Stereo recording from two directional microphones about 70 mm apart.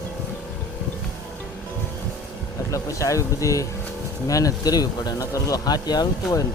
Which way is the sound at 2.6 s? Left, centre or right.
Left.